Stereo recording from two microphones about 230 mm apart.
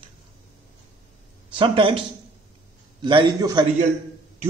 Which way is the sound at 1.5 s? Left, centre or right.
Right.